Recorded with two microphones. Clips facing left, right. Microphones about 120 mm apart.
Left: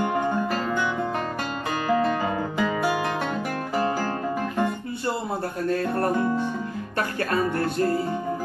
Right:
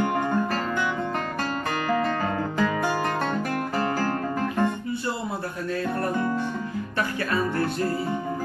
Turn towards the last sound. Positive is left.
turn(degrees=45)  # may be behind; listen again after turning